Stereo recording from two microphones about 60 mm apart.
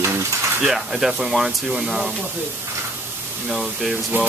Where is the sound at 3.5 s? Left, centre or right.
Centre.